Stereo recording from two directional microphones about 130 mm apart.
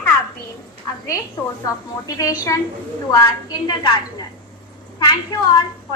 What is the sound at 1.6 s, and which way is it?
A woman's voice, 30° left (ahead or behind).